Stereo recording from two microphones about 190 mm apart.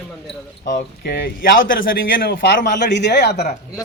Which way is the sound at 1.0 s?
55° left (ahead or behind).